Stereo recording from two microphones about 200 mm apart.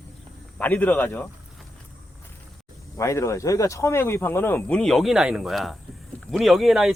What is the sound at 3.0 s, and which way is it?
Speech, 15° left (ahead or behind).